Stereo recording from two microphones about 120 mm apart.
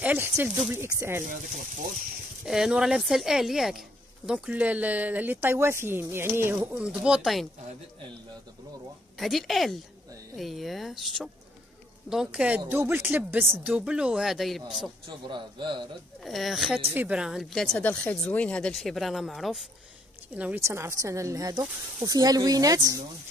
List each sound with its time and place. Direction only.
0.0 s speech: 15° right (ahead or behind)
2.4 s speech: 5° right (ahead or behind)
9.2 s speech: centre (ahead or behind)
15.0 s speech: 40° right (ahead or behind)
16.3 s speech: centre (ahead or behind)
20.3 s speech: 10° right (ahead or behind)
20.6 s speech: 25° right (ahead or behind)